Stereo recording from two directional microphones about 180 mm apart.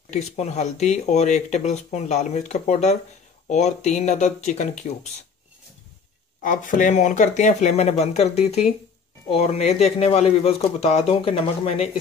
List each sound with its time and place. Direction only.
0.1 s speech: 40° left (ahead or behind)
6.4 s speech: 45° left (ahead or behind)